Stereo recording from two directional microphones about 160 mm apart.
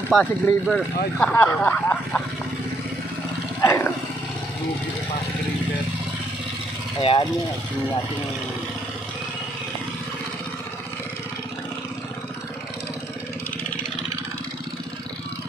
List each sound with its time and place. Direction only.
0.1 s speech: 5° left (ahead or behind)
3.6 s roaring cats: 15° left (ahead or behind)
7.0 s speech: 35° left (ahead or behind)